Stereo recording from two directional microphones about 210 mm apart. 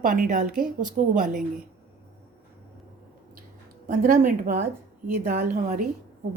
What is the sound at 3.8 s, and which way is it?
Speech, 40° right (ahead or behind).